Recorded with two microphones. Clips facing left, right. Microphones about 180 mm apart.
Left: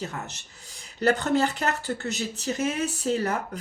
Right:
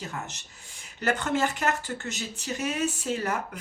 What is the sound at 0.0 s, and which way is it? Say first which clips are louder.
Speech: left 2 dB; 35° left (ahead or behind).